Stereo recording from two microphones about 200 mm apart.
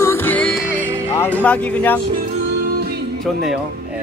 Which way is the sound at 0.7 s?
10° right (ahead or behind).